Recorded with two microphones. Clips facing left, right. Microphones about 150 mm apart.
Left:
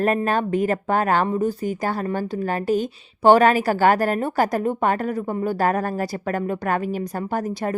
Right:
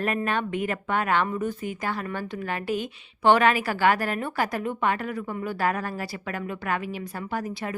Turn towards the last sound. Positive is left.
turn(degrees=40)  # may be behind; listen again after turning